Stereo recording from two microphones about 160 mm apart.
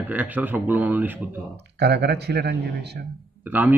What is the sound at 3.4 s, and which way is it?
Speech, 10° right (ahead or behind).